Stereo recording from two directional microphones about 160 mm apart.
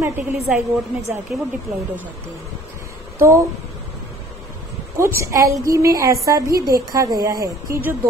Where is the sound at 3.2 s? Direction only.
20° right (ahead or behind).